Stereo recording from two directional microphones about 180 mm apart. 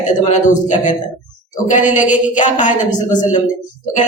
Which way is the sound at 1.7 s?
45° left (ahead or behind).